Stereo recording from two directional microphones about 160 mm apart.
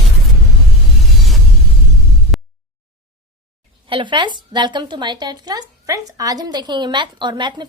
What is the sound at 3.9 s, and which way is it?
A woman's voice, 30° right (ahead or behind).